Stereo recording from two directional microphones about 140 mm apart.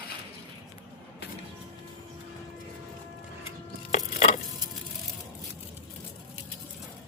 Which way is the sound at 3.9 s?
60° left (ahead or behind).